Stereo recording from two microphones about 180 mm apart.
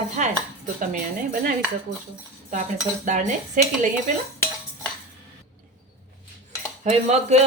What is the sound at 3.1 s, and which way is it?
Speech, 40° right (ahead or behind).